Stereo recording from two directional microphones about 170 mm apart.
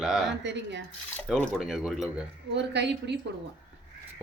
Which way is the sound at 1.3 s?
Centre (ahead or behind).